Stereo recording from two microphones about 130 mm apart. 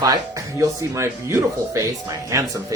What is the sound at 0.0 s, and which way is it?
Speech, 25° right (ahead or behind).